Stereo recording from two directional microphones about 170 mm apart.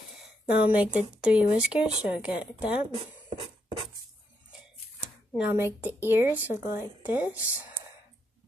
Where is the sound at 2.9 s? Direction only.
30° right (ahead or behind).